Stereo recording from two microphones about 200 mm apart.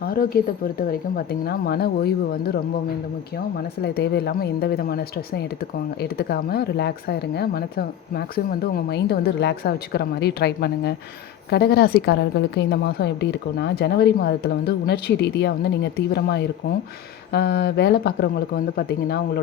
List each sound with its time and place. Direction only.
0.0 s a woman's voice: 50° left (ahead or behind)